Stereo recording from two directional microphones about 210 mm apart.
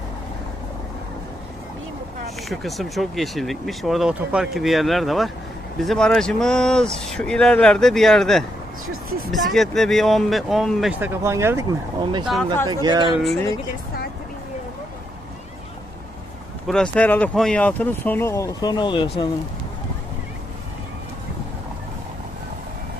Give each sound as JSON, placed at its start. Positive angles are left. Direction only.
{"t": 2.5, "sound": "speech", "side_deg": 0}
{"t": 11.1, "sound": "speech", "side_deg": -15}
{"t": 12.2, "sound": "speech", "side_deg": 0}
{"t": 12.8, "sound": "speech", "side_deg": -20}
{"t": 16.6, "sound": "speech", "side_deg": 5}